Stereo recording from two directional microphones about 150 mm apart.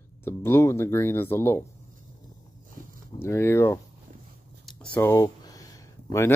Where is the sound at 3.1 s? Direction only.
15° left (ahead or behind).